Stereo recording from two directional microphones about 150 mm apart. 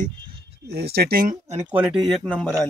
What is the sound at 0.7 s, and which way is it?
Speech, 90° right.